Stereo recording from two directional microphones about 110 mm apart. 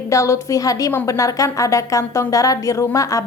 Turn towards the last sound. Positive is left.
turn(degrees=30)  # may be behind; listen again after turning